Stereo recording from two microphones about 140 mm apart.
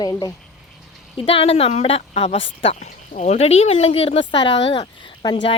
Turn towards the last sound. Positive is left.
turn(degrees=30)  # may be behind; listen again after turning